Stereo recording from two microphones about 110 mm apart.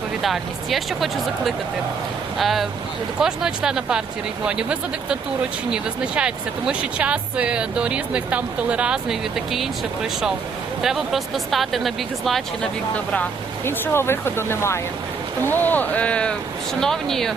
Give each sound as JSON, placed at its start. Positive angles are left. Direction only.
{"t": 0.2, "sound": "speech", "side_deg": 0}
{"t": 13.7, "sound": "speech", "side_deg": 20}